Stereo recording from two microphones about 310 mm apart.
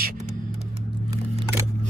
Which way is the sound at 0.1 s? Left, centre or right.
Right.